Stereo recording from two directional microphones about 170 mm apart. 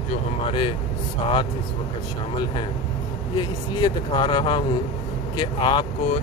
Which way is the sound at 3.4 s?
25° left (ahead or behind).